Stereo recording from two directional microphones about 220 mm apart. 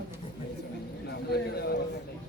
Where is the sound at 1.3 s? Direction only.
45° left (ahead or behind).